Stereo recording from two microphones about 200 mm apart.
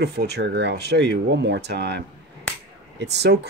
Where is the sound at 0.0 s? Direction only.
55° right (ahead or behind).